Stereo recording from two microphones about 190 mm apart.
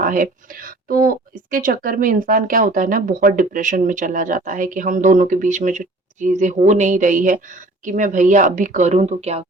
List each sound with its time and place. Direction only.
0.0 s a woman's voice: 45° right (ahead or behind)